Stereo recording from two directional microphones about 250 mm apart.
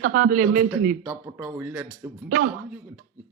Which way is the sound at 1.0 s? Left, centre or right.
Centre.